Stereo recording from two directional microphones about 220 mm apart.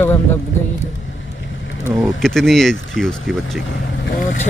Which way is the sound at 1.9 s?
10° right (ahead or behind).